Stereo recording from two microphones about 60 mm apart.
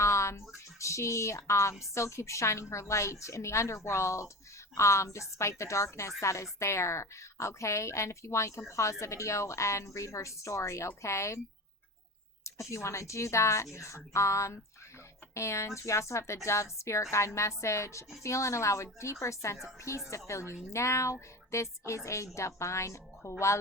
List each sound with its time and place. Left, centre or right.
0.0 s a sound: left
2.0 s a woman's voice: left
12.5 s a woman's voice: left